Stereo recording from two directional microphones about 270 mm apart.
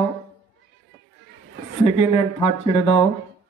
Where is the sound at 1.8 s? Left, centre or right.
Left.